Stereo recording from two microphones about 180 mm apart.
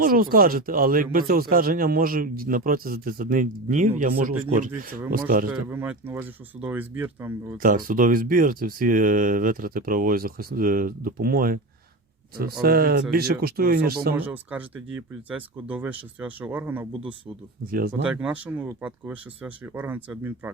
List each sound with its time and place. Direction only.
0.0 s speech: 50° right (ahead or behind)
5.5 s speech: 10° right (ahead or behind)
7.6 s speech: 50° right (ahead or behind)
12.6 s speech: 55° right (ahead or behind)
14.2 s speech: 10° right (ahead or behind)
17.7 s speech: 55° right (ahead or behind)
18.0 s speech: 5° right (ahead or behind)